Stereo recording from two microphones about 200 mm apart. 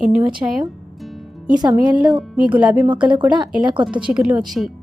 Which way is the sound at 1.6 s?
20° right (ahead or behind).